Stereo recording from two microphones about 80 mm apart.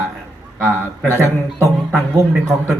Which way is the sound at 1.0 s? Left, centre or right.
Right.